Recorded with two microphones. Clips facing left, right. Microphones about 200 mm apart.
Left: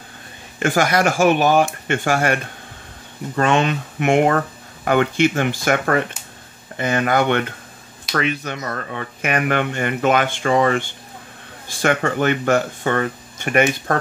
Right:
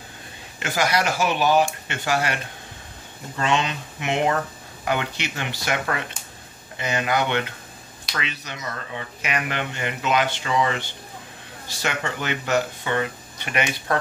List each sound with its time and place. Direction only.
0.6 s speech: 50° left (ahead or behind)